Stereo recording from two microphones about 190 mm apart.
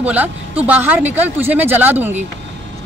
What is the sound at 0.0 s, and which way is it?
Speech, 10° right (ahead or behind).